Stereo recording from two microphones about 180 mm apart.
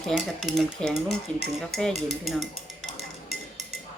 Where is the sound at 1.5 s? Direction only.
Centre (ahead or behind).